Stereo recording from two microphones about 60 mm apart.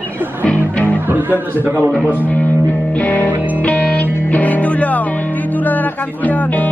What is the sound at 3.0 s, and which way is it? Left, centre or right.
Music, left.